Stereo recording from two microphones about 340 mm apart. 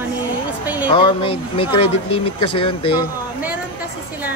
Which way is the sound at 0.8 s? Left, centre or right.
Centre.